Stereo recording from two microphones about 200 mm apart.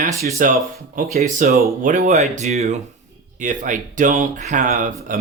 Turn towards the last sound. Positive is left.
turn(degrees=-40)  # may be behind; listen again after turning